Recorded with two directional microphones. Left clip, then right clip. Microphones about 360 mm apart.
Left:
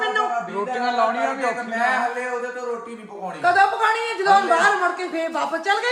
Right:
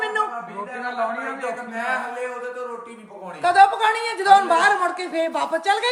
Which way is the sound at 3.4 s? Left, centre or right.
Right.